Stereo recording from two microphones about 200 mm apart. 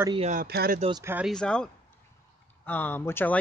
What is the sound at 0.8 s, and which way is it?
Speech, 20° right (ahead or behind).